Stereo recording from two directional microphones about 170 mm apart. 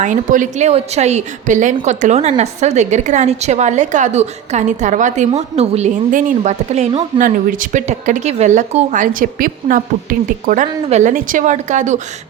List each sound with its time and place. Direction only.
0.0 s speech: 50° right (ahead or behind)